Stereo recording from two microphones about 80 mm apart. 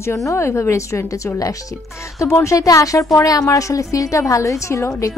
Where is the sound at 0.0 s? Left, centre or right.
Left.